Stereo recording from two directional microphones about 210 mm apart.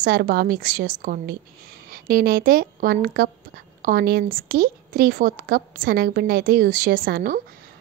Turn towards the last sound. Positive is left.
turn(degrees=-40)  # may be behind; listen again after turning